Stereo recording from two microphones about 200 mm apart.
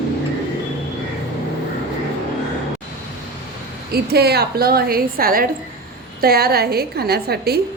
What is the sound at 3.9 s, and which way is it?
A woman's voice, 50° right (ahead or behind).